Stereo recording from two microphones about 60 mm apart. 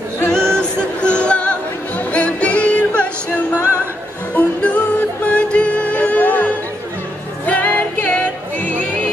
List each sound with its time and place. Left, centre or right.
0.3 s music: centre
4.4 s music: left